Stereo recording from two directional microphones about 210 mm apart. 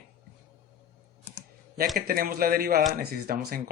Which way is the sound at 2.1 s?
45° right (ahead or behind).